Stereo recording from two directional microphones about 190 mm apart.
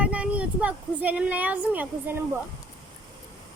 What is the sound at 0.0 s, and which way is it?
Speech, 5° right (ahead or behind).